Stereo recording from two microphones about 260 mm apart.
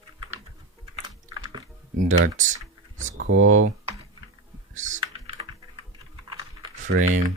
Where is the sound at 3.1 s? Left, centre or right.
Right.